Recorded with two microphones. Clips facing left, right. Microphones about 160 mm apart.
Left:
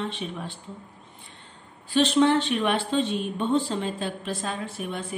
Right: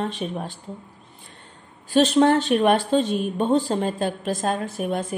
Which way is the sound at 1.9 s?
45° right (ahead or behind).